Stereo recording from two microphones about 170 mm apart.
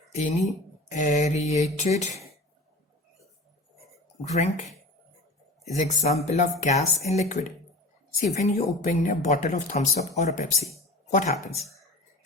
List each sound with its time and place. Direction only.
0.1 s speech: 40° left (ahead or behind)
5.7 s speech: 45° left (ahead or behind)